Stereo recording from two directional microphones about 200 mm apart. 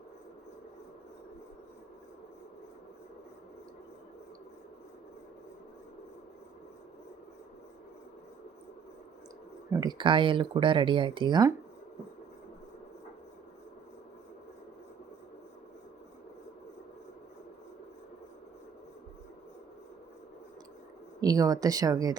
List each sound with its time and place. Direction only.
9.7 s speech: 20° right (ahead or behind)
21.2 s speech: 20° right (ahead or behind)